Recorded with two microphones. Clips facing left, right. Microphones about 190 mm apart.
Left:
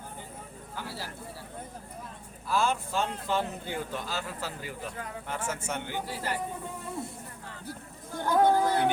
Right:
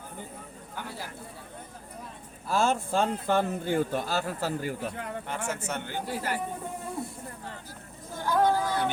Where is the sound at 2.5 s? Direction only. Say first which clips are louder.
Right 3 dB; 45° right (ahead or behind).